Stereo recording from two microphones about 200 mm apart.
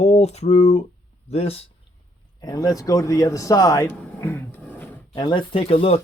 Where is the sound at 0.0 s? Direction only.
30° left (ahead or behind).